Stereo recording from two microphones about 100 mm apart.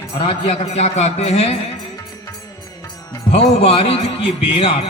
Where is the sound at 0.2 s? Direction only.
80° left.